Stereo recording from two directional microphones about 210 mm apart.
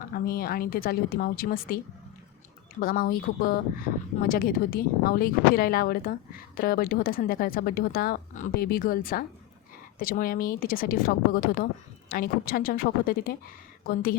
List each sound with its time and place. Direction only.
0.1 s a woman's voice: 45° left (ahead or behind)
2.8 s a woman's voice: 45° left (ahead or behind)